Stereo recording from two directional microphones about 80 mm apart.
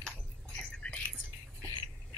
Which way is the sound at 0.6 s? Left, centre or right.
Centre.